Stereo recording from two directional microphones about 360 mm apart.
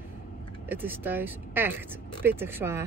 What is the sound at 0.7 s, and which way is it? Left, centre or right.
Speech, centre.